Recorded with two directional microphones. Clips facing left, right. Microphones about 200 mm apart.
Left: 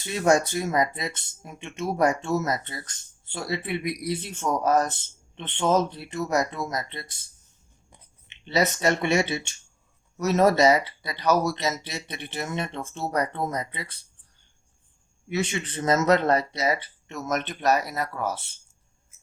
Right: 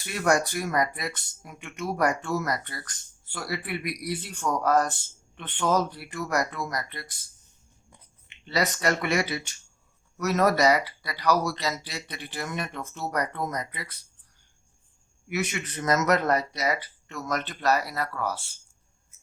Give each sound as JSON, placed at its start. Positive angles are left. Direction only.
{"t": 0.0, "sound": "speech", "side_deg": 25}
{"t": 8.3, "sound": "speech", "side_deg": 20}
{"t": 15.3, "sound": "speech", "side_deg": 30}